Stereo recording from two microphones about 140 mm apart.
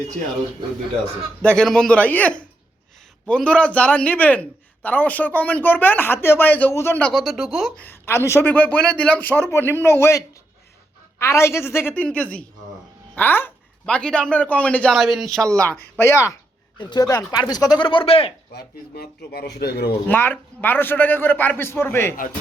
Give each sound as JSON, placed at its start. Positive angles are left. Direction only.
{"t": 1.4, "sound": "a man's voice", "side_deg": 5}
{"t": 7.1, "sound": "speech", "side_deg": 0}
{"t": 7.8, "sound": "a man's voice", "side_deg": 15}
{"t": 14.9, "sound": "speech", "side_deg": 0}
{"t": 16.7, "sound": "speech", "side_deg": 30}
{"t": 18.9, "sound": "speech", "side_deg": 90}
{"t": 20.1, "sound": "a man's voice", "side_deg": 15}